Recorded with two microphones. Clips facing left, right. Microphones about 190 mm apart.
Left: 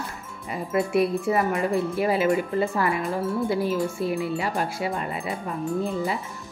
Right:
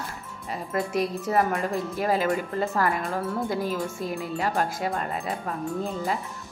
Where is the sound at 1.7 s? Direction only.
40° right (ahead or behind).